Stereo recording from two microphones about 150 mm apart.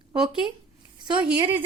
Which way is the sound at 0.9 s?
30° right (ahead or behind).